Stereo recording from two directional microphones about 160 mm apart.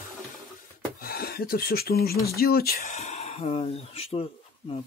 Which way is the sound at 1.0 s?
70° left (ahead or behind).